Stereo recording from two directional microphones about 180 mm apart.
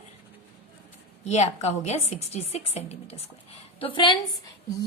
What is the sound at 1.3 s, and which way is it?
A woman's voice, 40° left (ahead or behind).